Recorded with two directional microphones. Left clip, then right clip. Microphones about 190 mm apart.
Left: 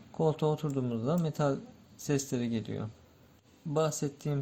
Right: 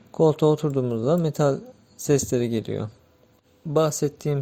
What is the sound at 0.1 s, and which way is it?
Speech, 35° right (ahead or behind).